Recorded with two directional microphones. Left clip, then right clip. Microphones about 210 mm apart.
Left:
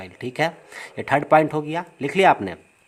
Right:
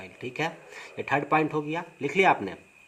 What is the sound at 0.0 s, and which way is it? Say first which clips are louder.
Speech: left 7 dB; 50° left (ahead or behind).